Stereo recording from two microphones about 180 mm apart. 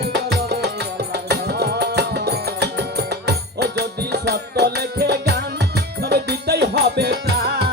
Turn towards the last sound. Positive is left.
turn(degrees=-60)  # may be behind; listen again after turning